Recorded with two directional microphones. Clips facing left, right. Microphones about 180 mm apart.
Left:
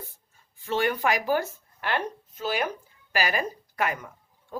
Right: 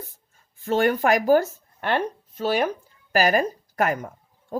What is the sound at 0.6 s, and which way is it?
A woman's voice, 45° right (ahead or behind).